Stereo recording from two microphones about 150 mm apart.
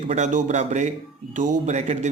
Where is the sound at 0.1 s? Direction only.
55° right (ahead or behind).